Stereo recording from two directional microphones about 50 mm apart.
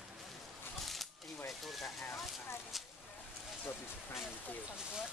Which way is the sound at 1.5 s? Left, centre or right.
Centre.